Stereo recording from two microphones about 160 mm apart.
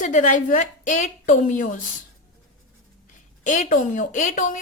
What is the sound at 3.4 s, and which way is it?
A woman's voice, 50° left (ahead or behind).